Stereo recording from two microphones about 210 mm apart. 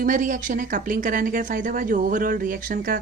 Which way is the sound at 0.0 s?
40° right (ahead or behind).